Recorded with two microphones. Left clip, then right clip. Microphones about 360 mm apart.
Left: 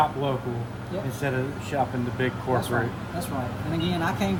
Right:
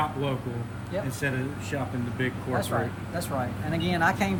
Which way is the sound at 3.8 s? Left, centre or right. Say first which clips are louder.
Right 3 dB; centre.